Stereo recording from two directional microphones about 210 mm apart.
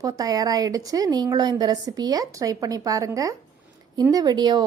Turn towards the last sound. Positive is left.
turn(degrees=-20)  # may be behind; listen again after turning